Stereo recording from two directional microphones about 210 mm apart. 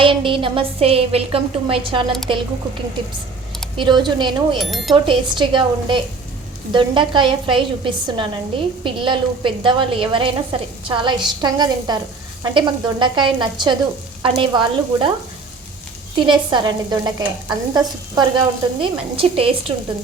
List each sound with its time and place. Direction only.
0.0 s speech: 25° right (ahead or behind)
3.8 s speech: 20° right (ahead or behind)
4.5 s speech: centre (ahead or behind)
5.0 s speech: 20° right (ahead or behind)
16.1 s speech: 20° right (ahead or behind)